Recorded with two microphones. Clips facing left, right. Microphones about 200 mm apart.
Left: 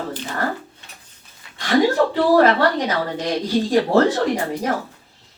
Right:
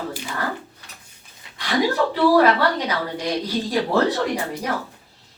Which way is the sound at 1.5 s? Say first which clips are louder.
Left 4 dB; 45° left (ahead or behind).